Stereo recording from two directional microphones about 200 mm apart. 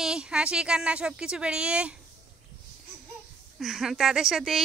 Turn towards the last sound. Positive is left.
turn(degrees=0)  # may be behind; listen again after turning